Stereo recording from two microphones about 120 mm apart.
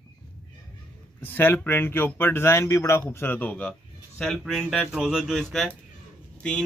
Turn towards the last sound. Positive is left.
turn(degrees=10)  # may be behind; listen again after turning